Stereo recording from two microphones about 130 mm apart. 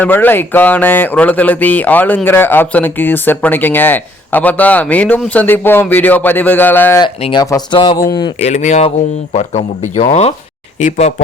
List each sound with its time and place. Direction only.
0.0 s speech: 15° left (ahead or behind)
7.3 s speech: 30° left (ahead or behind)
8.4 s speech: 55° left (ahead or behind)